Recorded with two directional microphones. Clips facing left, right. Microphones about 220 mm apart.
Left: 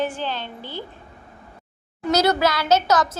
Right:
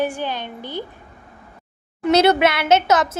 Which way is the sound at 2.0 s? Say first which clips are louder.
Right 4 dB; 25° right (ahead or behind).